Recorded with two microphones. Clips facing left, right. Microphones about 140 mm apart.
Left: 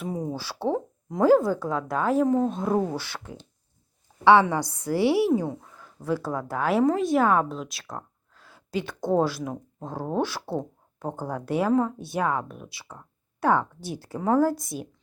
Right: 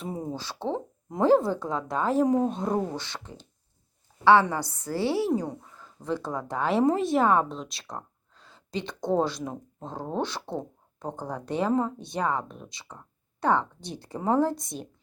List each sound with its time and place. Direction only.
0.0 s a sound: centre (ahead or behind)
0.3 s a woman's voice: 10° left (ahead or behind)
2.2 s speech: 10° right (ahead or behind)
2.5 s a woman's voice: 5° left (ahead or behind)